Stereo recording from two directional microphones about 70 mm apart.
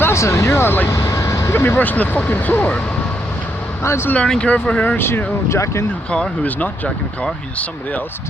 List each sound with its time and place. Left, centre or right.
0.0 s speech: left
0.9 s vehicle: left
1.5 s speech: left
3.8 s speech: left
4.3 s speech: centre; by 5.8 s left
6.1 s speech: centre